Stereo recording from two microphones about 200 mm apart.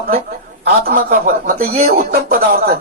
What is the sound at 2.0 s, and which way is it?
Speech, 50° right (ahead or behind).